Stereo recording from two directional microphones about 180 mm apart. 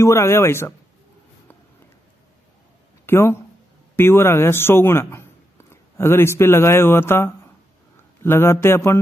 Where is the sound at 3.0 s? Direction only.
15° left (ahead or behind).